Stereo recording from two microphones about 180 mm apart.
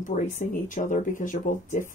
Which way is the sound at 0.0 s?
45° left (ahead or behind).